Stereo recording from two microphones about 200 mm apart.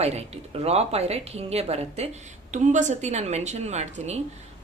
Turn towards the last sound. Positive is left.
turn(degrees=-35)  # may be behind; listen again after turning